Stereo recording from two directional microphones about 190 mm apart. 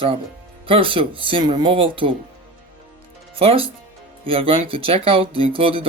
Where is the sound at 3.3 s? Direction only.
30° right (ahead or behind).